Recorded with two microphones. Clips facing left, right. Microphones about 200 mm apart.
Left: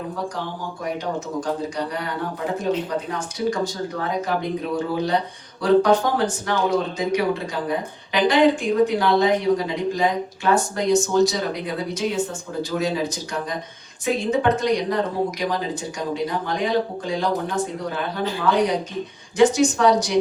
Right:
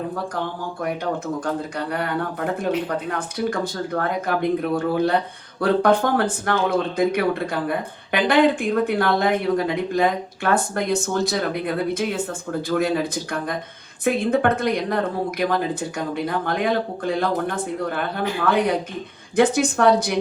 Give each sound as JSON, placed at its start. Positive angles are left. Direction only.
{"t": 1.4, "sound": "speech", "side_deg": -55}